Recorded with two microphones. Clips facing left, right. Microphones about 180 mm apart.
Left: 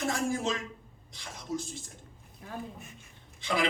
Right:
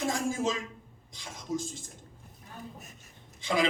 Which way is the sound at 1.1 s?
15° right (ahead or behind).